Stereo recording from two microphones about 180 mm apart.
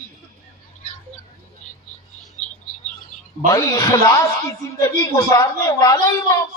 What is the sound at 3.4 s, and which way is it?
Speech, 20° left (ahead or behind).